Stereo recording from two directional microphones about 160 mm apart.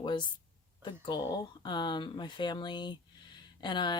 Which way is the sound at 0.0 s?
30° left (ahead or behind).